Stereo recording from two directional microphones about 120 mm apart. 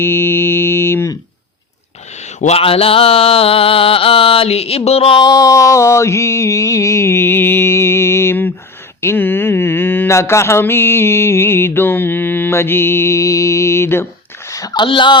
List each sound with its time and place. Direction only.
0.0 s mantra: 20° left (ahead or behind)
2.4 s mantra: 60° left (ahead or behind)
5.2 s mantra: 30° left (ahead or behind)
14.5 s speech: 30° left (ahead or behind)